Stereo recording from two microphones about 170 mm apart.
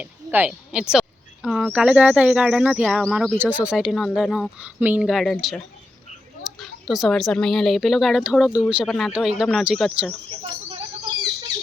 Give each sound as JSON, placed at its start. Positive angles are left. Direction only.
{"t": 0.0, "sound": "speech", "side_deg": -10}
{"t": 10.7, "sound": "bird", "side_deg": -25}